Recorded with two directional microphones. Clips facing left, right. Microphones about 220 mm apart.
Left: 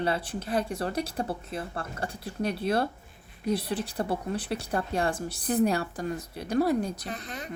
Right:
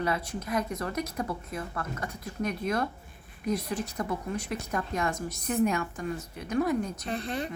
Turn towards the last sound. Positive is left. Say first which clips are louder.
# right 6 dB
turn(degrees=-30)  # may be behind; listen again after turning